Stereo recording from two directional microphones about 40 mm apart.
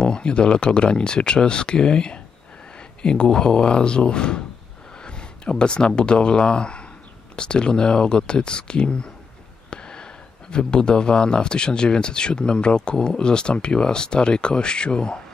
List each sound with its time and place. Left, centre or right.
0.0 s speech: left